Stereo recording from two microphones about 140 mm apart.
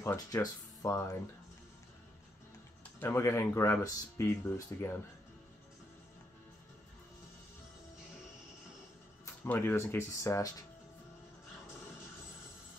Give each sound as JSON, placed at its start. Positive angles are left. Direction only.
{"t": 0.0, "sound": "speech", "side_deg": 20}
{"t": 2.8, "sound": "speech", "side_deg": 15}
{"t": 9.2, "sound": "speech", "side_deg": 15}